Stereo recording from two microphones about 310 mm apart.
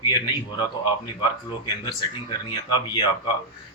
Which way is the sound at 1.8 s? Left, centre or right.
Centre.